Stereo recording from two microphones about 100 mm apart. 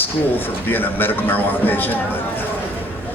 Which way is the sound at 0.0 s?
20° left (ahead or behind).